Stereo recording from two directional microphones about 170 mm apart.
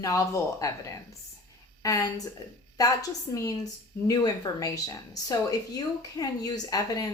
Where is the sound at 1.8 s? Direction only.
20° left (ahead or behind).